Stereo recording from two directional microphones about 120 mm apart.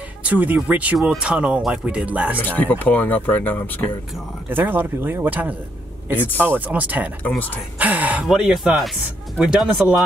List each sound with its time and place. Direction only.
0.2 s speech: 10° right (ahead or behind)
2.3 s speech: 15° left (ahead or behind)
4.5 s speech: 15° right (ahead or behind)
7.2 s speech: 15° left (ahead or behind)
7.8 s speech: 15° right (ahead or behind)